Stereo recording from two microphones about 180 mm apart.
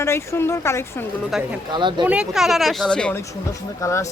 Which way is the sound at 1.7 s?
25° right (ahead or behind).